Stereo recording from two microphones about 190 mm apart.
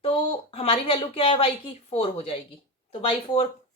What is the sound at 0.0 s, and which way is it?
A woman's voice, 30° left (ahead or behind).